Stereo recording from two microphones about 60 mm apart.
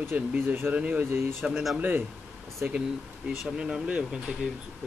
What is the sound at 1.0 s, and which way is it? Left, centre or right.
Speech, right.